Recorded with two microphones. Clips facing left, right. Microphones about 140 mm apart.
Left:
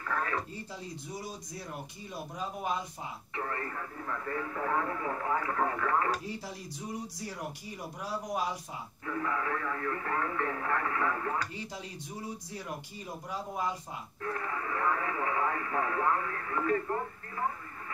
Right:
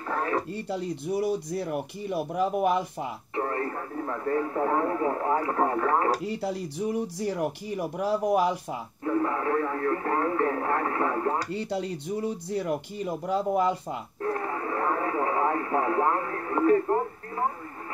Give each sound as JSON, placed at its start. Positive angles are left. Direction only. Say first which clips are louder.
{"t": 0.0, "sound": "a sound", "louder": "right 6 dB", "side_deg": -30}
{"t": 0.5, "sound": "speech", "louder": "right 11 dB", "side_deg": -70}
{"t": 3.3, "sound": "speech", "louder": "right 8 dB", "side_deg": -30}
{"t": 6.2, "sound": "speech", "louder": "right 10 dB", "side_deg": -70}
{"t": 9.0, "sound": "radio", "louder": "right 8 dB", "side_deg": -35}
{"t": 11.5, "sound": "speech", "louder": "right 12 dB", "side_deg": -70}
{"t": 14.2, "sound": "radio", "louder": "right 6 dB", "side_deg": -35}